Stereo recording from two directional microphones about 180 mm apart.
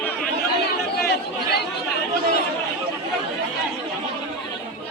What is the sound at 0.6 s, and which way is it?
Chatter, 65° left (ahead or behind).